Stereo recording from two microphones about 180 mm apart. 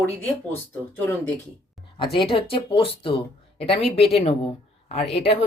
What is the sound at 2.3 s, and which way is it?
Speech, 30° left (ahead or behind).